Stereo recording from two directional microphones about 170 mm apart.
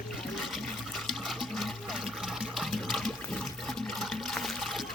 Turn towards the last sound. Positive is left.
turn(degrees=0)  # may be behind; listen again after turning